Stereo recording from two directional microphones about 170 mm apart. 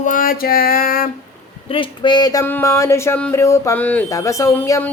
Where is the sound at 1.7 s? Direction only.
30° left (ahead or behind).